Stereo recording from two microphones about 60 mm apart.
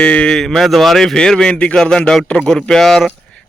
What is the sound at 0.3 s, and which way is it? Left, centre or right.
Speech, centre.